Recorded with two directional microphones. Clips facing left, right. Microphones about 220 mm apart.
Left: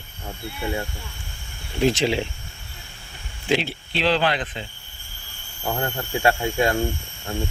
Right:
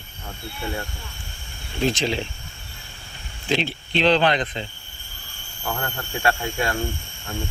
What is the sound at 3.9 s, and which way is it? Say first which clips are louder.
Speech: right 3 dB; 5° left (ahead or behind).